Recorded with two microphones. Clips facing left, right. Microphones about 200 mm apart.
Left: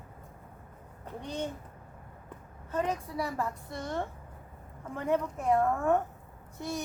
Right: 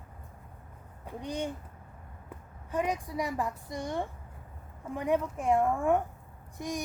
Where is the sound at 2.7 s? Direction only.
15° right (ahead or behind).